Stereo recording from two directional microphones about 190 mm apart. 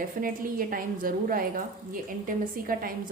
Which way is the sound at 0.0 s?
50° right (ahead or behind).